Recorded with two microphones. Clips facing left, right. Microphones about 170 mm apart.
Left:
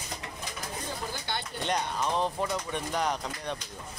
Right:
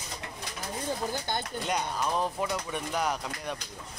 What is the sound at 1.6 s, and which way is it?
Speech, 5° right (ahead or behind).